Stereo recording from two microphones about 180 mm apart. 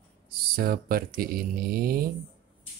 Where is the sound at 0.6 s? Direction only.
55° right (ahead or behind).